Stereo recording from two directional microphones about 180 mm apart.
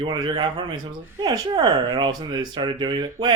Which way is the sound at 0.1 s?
25° right (ahead or behind).